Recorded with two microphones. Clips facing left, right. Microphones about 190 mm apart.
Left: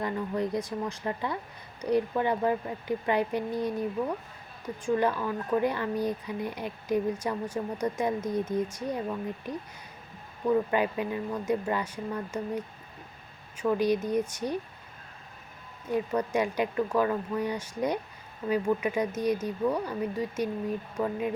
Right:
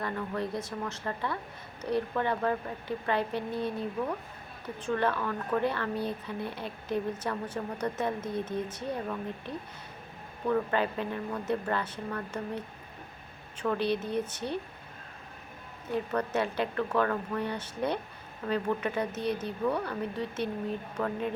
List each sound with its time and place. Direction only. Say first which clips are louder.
0.0 s speech: left 3 dB; 15° left (ahead or behind)
4.8 s speech: left 3 dB; 10° left (ahead or behind)
15.9 s speech: left 3 dB; 10° left (ahead or behind)